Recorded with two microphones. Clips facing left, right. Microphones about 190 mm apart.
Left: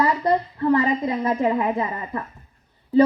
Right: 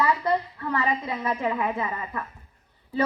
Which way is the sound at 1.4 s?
30° left (ahead or behind).